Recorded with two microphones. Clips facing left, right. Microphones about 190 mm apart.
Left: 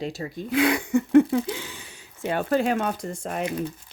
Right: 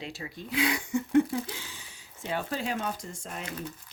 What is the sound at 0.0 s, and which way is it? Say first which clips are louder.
Speech: left 8 dB; 40° left (ahead or behind).